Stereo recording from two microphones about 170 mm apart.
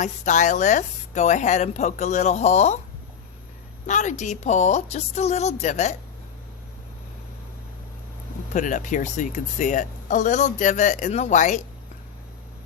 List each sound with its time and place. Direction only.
0.0 s speech: 45° left (ahead or behind)
3.8 s a woman's voice: 45° left (ahead or behind)
8.5 s speech: 50° left (ahead or behind)